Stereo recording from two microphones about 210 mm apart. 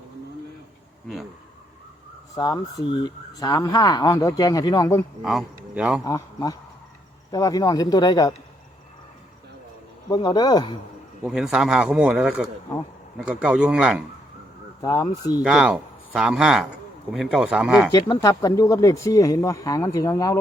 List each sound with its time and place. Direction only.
2.3 s speech: 15° left (ahead or behind)
5.2 s speech: centre (ahead or behind)
6.1 s speech: 15° left (ahead or behind)
10.1 s speech: 20° left (ahead or behind)
11.2 s a man's voice: centre (ahead or behind)
14.8 s speech: 15° left (ahead or behind)
15.4 s a man's voice: 5° right (ahead or behind)
17.9 s speech: 20° left (ahead or behind)